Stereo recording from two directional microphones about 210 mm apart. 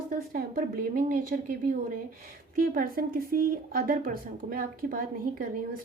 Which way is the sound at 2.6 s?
45° right (ahead or behind).